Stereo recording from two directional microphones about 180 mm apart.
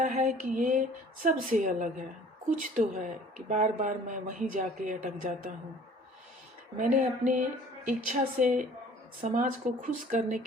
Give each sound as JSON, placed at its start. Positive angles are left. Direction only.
{"t": 0.0, "sound": "speech", "side_deg": -45}
{"t": 6.9, "sound": "speech", "side_deg": -45}